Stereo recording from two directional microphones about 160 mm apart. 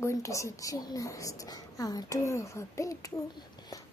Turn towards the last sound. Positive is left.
turn(degrees=20)  # may be behind; listen again after turning